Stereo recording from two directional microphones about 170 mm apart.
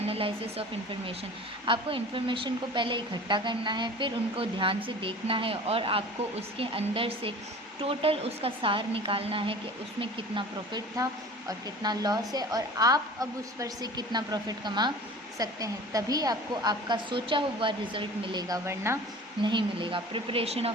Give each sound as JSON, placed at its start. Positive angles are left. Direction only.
{"t": 0.0, "sound": "speech", "side_deg": -35}
{"t": 1.6, "sound": "a woman's voice", "side_deg": -30}
{"t": 19.4, "sound": "a woman's voice", "side_deg": -30}